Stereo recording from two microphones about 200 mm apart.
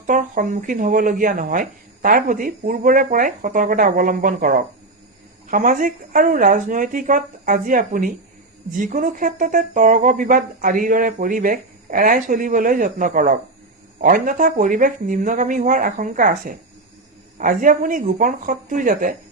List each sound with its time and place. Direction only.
0.1 s speech: 40° right (ahead or behind)